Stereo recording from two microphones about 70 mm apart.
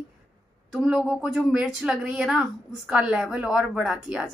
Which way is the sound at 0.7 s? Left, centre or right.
Centre.